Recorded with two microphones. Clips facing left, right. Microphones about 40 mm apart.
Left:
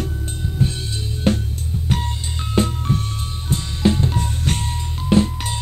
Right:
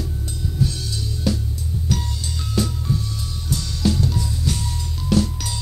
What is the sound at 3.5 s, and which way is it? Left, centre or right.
Music, left.